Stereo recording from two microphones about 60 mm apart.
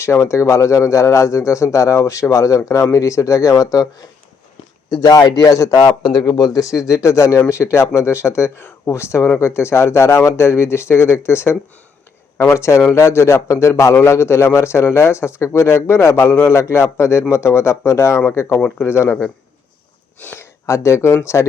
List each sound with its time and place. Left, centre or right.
0.0 s a man's voice: left
5.0 s a man's voice: left
12.5 s a man's voice: left
19.0 s speech: left
20.3 s a man's voice: left